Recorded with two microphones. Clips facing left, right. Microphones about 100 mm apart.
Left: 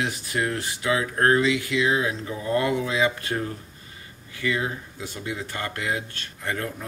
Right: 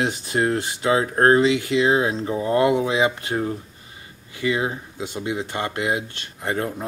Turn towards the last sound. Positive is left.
turn(degrees=-25)  # may be behind; listen again after turning